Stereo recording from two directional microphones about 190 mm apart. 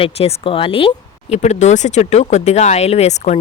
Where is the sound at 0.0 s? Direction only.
30° left (ahead or behind).